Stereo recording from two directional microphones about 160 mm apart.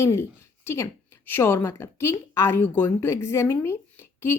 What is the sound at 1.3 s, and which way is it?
A woman's voice, 15° left (ahead or behind).